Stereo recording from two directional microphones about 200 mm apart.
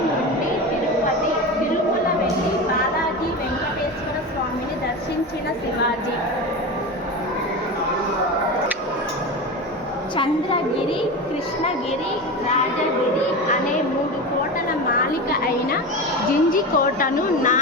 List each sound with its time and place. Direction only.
16.5 s a woman's voice: 45° left (ahead or behind)